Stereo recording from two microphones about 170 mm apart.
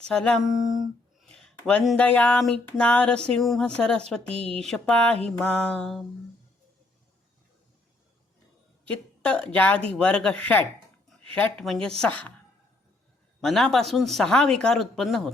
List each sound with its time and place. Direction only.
0.1 s speech: 5° left (ahead or behind)
4.3 s a woman's voice: 35° right (ahead or behind)
4.5 s speech: 5° left (ahead or behind)
8.8 s speech: 5° left (ahead or behind)
13.4 s speech: centre (ahead or behind)